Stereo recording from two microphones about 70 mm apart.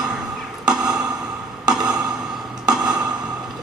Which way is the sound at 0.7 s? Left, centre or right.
Centre.